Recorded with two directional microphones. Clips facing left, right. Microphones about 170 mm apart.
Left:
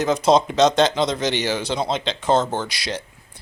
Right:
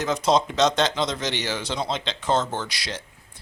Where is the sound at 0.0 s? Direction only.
10° left (ahead or behind).